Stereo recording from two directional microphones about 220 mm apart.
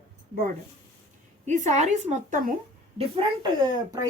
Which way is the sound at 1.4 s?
35° right (ahead or behind).